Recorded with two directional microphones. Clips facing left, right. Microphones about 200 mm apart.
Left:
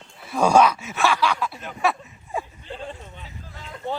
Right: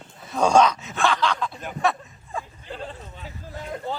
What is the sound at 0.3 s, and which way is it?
Chuckle, 10° left (ahead or behind).